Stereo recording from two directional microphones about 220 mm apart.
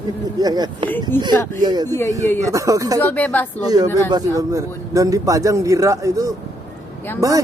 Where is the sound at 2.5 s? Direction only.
15° right (ahead or behind).